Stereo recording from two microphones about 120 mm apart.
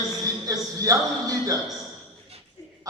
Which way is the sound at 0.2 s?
30° right (ahead or behind).